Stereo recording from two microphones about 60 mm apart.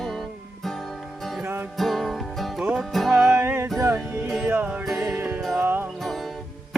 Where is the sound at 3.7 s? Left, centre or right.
Right.